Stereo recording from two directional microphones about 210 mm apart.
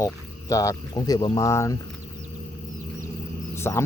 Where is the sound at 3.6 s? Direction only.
10° left (ahead or behind).